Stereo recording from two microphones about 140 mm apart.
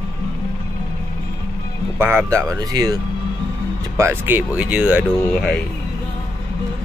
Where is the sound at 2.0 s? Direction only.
15° right (ahead or behind).